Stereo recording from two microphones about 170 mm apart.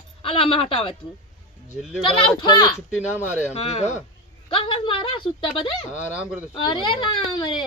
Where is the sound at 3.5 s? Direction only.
40° left (ahead or behind).